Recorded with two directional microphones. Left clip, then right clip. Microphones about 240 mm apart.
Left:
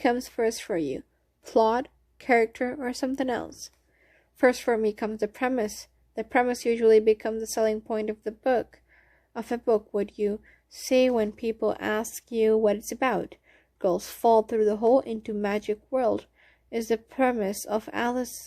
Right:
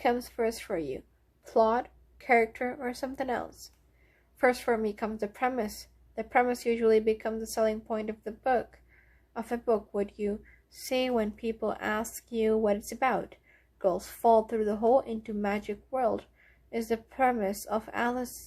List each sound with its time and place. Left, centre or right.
0.0 s a woman's voice: left